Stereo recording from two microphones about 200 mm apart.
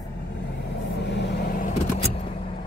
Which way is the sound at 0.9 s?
60° left (ahead or behind).